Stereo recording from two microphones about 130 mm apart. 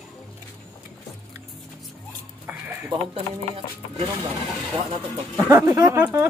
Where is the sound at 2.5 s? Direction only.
15° right (ahead or behind).